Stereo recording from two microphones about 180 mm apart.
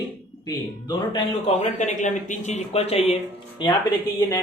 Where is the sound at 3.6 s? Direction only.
15° left (ahead or behind).